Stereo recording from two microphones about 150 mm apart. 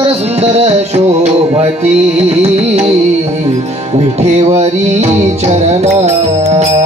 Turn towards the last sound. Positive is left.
turn(degrees=-45)  # may be behind; listen again after turning